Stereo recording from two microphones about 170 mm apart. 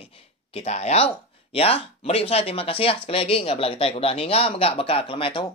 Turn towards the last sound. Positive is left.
turn(degrees=30)  # may be behind; listen again after turning